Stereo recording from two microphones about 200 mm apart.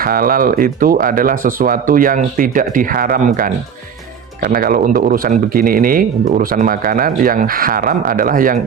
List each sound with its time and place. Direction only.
0.0 s speech: 45° right (ahead or behind)